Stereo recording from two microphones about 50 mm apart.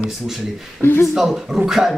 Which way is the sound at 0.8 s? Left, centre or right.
Left.